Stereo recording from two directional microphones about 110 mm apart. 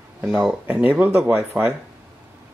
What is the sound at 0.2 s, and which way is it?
Speech, 10° right (ahead or behind).